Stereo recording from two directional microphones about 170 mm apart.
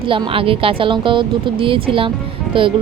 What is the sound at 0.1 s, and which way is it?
A woman's voice, 30° right (ahead or behind).